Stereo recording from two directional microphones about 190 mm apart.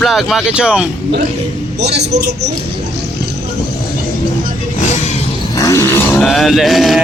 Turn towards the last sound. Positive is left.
turn(degrees=0)  # may be behind; listen again after turning